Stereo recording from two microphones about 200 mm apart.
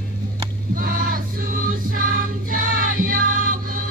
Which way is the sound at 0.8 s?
45° right (ahead or behind).